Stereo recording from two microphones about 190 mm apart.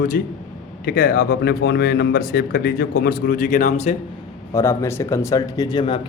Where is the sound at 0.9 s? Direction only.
50° left (ahead or behind).